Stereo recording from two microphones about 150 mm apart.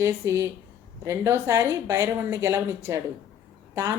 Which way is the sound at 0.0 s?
20° right (ahead or behind).